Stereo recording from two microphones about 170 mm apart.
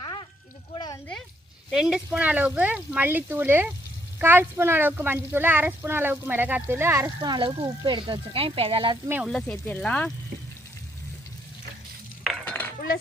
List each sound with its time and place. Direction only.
0.0 s a sound: 25° left (ahead or behind)
1.7 s speech: 5° right (ahead or behind)
7.2 s speech: 30° right (ahead or behind)
9.2 s speech: 5° left (ahead or behind)
12.2 s chink: 5° left (ahead or behind)